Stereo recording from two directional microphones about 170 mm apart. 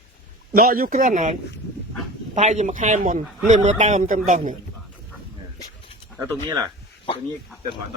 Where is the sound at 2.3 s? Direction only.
45° right (ahead or behind).